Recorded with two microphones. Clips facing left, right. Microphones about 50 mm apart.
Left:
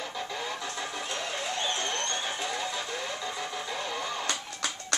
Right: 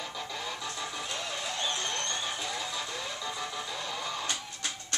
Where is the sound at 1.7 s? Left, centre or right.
Left.